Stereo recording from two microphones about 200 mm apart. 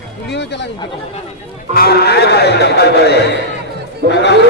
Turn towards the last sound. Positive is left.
turn(degrees=60)  # may be behind; listen again after turning